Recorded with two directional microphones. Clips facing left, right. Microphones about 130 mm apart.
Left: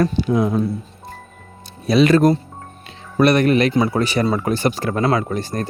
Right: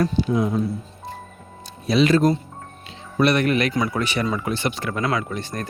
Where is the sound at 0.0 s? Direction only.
70° left (ahead or behind).